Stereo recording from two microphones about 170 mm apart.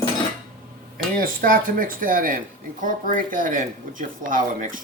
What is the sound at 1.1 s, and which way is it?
Speech, 55° right (ahead or behind).